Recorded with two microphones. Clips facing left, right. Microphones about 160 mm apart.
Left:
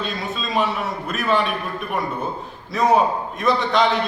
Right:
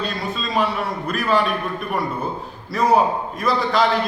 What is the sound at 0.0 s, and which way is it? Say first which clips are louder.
A man's voice: right 1 dB; centre (ahead or behind).